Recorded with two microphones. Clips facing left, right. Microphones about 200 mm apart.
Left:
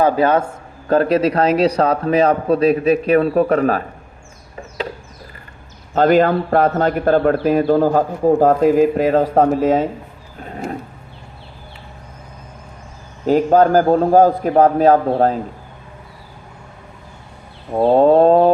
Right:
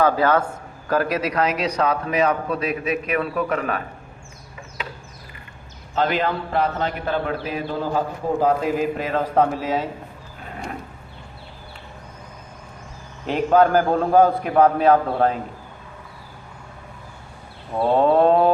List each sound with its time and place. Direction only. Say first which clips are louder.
0.0 s a man's voice: left 4 dB; 20° left (ahead or behind)
5.9 s a man's voice: left 9 dB; 45° left (ahead or behind)
13.2 s a man's voice: left 4 dB; 40° left (ahead or behind)
17.7 s a man's voice: left 6 dB; 40° left (ahead or behind)